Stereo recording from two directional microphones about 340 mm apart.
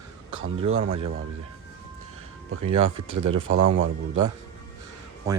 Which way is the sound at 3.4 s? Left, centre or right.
Right.